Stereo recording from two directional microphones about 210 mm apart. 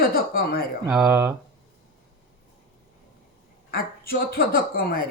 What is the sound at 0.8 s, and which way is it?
Speech, 5° right (ahead or behind).